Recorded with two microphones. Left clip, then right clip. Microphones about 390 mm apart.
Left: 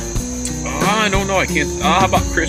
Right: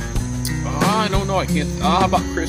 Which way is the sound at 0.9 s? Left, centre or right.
Right.